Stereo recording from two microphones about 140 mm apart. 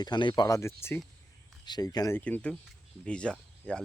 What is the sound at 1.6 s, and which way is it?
Speech, 30° left (ahead or behind).